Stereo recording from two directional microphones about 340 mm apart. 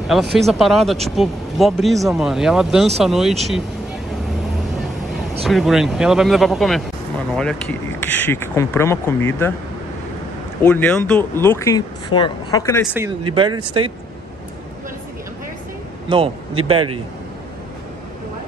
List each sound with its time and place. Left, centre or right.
0.1 s speech: centre
5.4 s speech: centre
10.6 s speech: centre
13.3 s speech: centre
16.1 s a man's voice: centre